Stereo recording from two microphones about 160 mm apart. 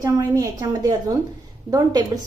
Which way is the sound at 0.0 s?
25° right (ahead or behind).